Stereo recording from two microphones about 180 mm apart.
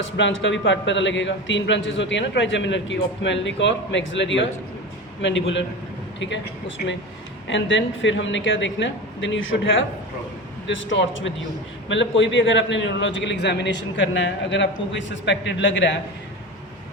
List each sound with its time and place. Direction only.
0.2 s a man's voice: 90° left